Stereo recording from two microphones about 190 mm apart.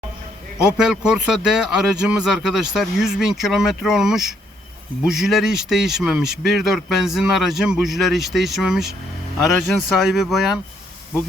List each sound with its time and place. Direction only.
0.8 s speech: 5° right (ahead or behind)